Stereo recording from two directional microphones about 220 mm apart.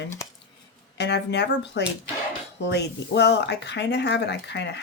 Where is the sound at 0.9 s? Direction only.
50° left (ahead or behind).